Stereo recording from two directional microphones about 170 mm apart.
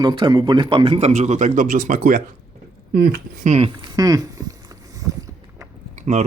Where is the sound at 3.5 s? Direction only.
35° right (ahead or behind).